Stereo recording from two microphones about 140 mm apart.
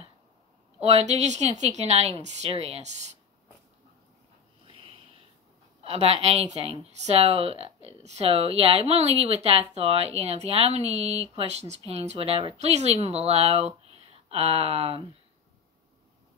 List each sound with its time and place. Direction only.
0.7 s speech: 50° right (ahead or behind)
4.6 s a sound: 40° right (ahead or behind)
5.9 s speech: 50° right (ahead or behind)